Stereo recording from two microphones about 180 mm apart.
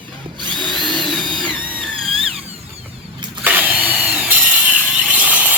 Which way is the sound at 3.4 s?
10° right (ahead or behind).